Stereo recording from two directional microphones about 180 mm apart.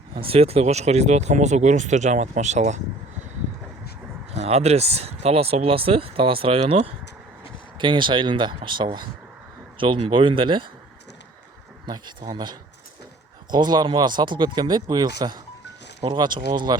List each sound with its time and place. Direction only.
0.1 s speech: 30° right (ahead or behind)
4.4 s speech: 35° right (ahead or behind)
11.9 s speech: 25° right (ahead or behind)